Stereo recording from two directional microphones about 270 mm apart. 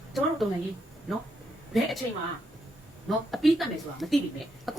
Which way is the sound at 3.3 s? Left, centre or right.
Centre.